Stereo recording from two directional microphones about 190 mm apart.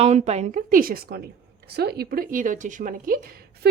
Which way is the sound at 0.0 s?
35° right (ahead or behind).